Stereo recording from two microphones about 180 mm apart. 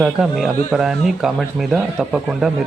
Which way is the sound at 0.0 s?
Centre (ahead or behind).